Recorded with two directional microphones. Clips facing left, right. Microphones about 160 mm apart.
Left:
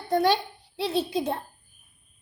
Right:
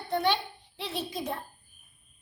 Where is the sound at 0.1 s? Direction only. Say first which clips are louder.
Left 5 dB; 40° left (ahead or behind).